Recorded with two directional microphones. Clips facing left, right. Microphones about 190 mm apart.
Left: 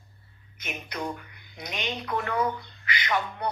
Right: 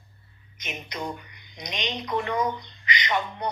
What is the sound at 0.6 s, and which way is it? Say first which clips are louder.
Speech: even; 5° left (ahead or behind).